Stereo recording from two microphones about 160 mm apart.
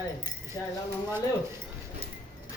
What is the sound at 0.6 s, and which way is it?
Speech, 20° left (ahead or behind).